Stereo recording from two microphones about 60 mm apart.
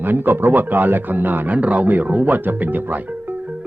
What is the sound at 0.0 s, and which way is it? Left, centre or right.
Speech, right.